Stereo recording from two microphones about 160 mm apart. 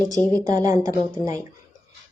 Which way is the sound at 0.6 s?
20° right (ahead or behind).